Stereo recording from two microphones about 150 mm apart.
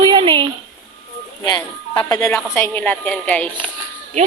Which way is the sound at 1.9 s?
20° left (ahead or behind).